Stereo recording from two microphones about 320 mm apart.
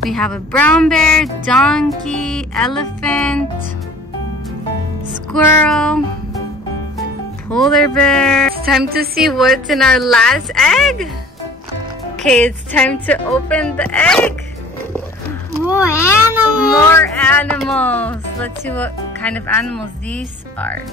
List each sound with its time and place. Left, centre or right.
0.1 s speech: centre
5.3 s speech: centre
7.4 s speech: centre
8.8 s a woman's voice: right
9.1 s speech: centre
12.2 s speech: centre
15.7 s a child's voice: centre